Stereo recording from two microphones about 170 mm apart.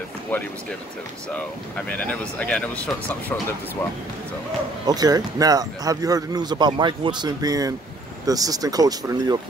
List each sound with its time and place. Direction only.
0.3 s speech: 10° left (ahead or behind)
1.9 s speech: 5° left (ahead or behind)
4.8 s speech: 20° right (ahead or behind)